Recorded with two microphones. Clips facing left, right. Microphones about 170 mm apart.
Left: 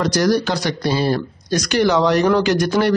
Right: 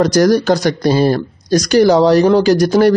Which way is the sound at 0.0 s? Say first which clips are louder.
Right 6 dB; 45° right (ahead or behind).